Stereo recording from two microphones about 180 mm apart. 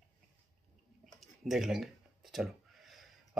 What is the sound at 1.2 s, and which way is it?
Speech, centre (ahead or behind).